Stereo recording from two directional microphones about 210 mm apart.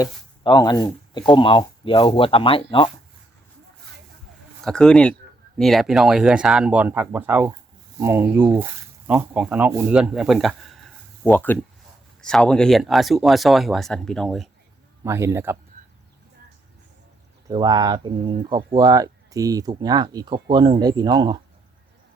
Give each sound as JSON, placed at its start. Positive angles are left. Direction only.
{"t": 0.0, "sound": "speech", "side_deg": 20}
{"t": 4.6, "sound": "speech", "side_deg": 5}
{"t": 15.0, "sound": "a man's voice", "side_deg": -15}
{"t": 17.5, "sound": "speech", "side_deg": -20}